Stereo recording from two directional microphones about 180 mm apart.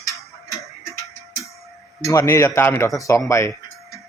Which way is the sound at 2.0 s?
15° left (ahead or behind).